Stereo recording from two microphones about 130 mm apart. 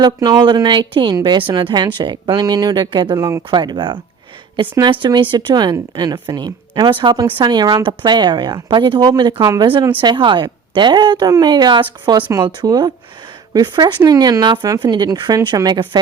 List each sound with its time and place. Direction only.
0.0 s speech: 30° right (ahead or behind)
3.2 s speech: 25° right (ahead or behind)